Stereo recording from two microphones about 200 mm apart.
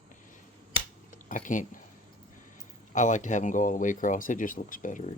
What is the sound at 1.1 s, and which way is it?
Speech, 40° left (ahead or behind).